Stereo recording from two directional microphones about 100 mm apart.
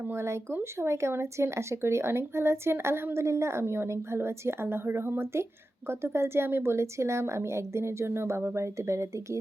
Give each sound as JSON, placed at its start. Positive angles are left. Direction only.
{"t": 0.0, "sound": "speech", "side_deg": -25}